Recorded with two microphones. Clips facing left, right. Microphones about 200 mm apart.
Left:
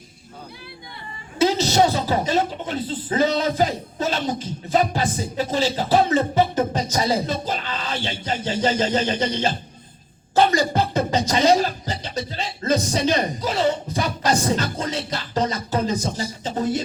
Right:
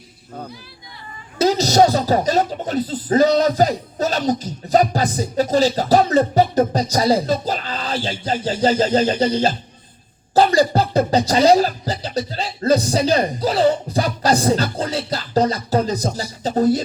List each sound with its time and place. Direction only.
1.4 s a woman's voice: 40° right (ahead or behind)